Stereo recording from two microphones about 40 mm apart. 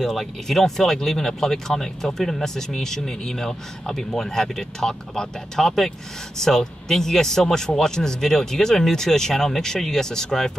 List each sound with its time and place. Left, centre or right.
0.0 s speech: centre